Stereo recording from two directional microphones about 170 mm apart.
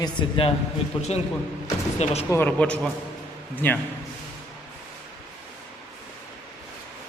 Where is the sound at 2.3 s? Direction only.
10° left (ahead or behind).